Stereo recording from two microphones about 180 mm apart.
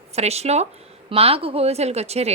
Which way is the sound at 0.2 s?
35° right (ahead or behind).